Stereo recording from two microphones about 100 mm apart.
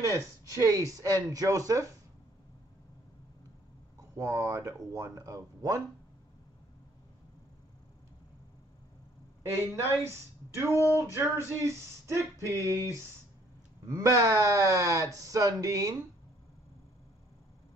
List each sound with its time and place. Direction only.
0.0 s speech: 35° right (ahead or behind)
4.2 s speech: 30° right (ahead or behind)
10.0 s a woman's voice: 30° right (ahead or behind)
10.9 s a sound: 25° right (ahead or behind)
13.8 s speech: 35° right (ahead or behind)